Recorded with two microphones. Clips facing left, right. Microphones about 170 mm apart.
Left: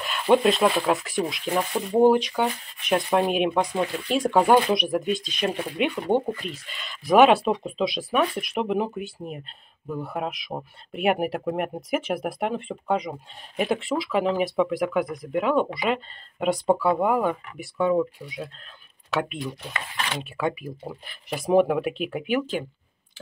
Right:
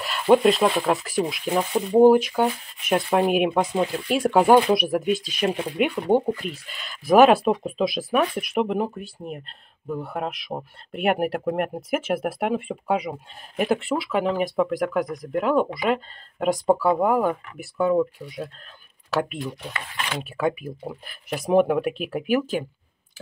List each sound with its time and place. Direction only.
0.0 s speech: 5° right (ahead or behind)
1.8 s speech: 20° right (ahead or behind)
2.0 s speech: 5° right (ahead or behind)